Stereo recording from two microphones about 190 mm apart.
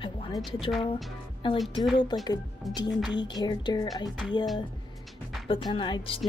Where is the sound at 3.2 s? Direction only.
20° left (ahead or behind).